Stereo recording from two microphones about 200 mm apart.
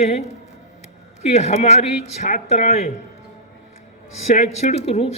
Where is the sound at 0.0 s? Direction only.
35° left (ahead or behind).